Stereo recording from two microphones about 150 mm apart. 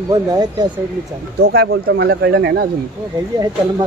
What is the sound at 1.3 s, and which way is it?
Speech, 90° right.